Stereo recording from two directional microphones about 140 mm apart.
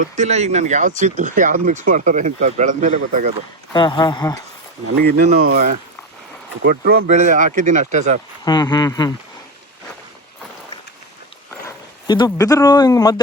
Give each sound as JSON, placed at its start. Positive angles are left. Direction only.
{"t": 0.2, "sound": "speech", "side_deg": -55}
{"t": 3.7, "sound": "speech", "side_deg": 35}
{"t": 5.4, "sound": "speech", "side_deg": -85}
{"t": 6.7, "sound": "speech", "side_deg": -80}
{"t": 8.4, "sound": "speech", "side_deg": 30}
{"t": 12.0, "sound": "speech", "side_deg": 30}